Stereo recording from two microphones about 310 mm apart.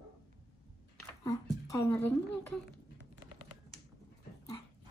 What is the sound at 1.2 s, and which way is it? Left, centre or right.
Speech, centre.